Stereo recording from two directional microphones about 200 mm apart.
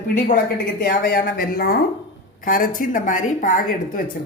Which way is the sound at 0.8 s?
45° left (ahead or behind).